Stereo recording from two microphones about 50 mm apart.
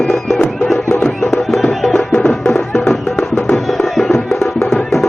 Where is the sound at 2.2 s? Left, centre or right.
Centre.